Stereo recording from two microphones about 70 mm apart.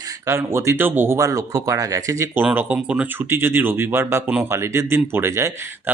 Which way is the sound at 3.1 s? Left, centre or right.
Right.